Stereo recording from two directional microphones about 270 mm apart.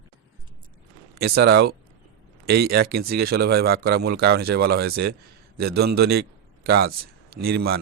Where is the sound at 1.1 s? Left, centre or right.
Right.